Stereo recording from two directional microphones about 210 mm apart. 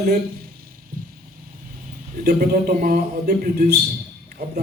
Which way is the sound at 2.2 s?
50° right (ahead or behind).